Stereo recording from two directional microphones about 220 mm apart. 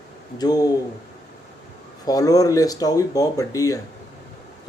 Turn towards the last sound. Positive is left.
turn(degrees=15)  # may be behind; listen again after turning